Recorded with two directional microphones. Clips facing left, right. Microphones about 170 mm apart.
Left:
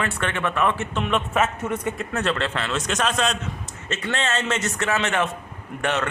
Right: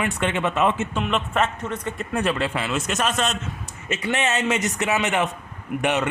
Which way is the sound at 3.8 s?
15° right (ahead or behind).